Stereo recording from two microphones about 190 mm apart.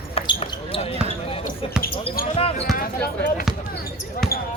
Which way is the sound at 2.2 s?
50° left (ahead or behind).